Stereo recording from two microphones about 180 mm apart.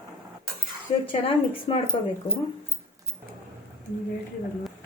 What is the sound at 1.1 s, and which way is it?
Speech, 30° left (ahead or behind).